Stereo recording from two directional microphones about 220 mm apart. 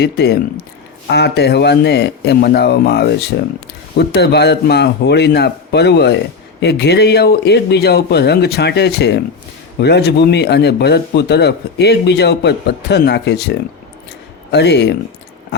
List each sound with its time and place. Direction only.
0.0 s a man's voice: 50° left (ahead or behind)